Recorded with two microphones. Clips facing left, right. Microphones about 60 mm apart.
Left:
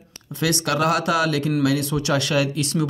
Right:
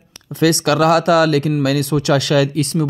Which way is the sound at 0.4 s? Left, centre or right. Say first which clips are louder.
Right 7 dB; right.